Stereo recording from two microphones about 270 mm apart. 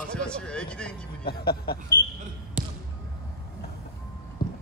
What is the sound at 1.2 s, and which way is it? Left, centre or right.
Speech, left.